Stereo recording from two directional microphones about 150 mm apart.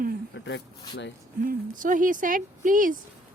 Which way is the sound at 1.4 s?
65° right (ahead or behind).